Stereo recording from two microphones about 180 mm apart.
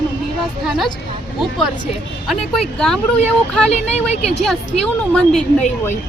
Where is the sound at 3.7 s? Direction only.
35° left (ahead or behind).